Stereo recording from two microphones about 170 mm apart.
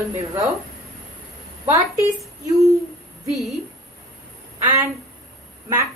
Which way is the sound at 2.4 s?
20° right (ahead or behind).